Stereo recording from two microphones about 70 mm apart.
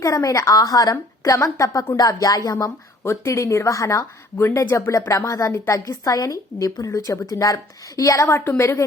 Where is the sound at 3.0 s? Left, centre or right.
Left.